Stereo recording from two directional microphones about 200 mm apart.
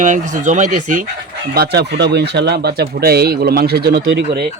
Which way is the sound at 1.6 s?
55° right (ahead or behind).